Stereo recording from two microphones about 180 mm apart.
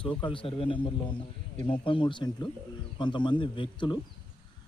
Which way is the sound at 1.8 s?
30° left (ahead or behind).